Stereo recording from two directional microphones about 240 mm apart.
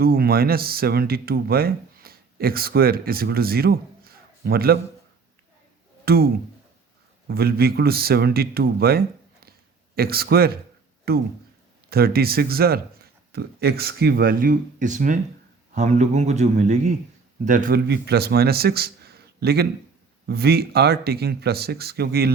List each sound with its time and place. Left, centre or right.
0.0 s speech: right
6.1 s a man's voice: right